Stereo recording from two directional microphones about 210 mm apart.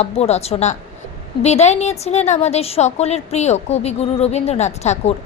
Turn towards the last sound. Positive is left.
turn(degrees=30)  # may be behind; listen again after turning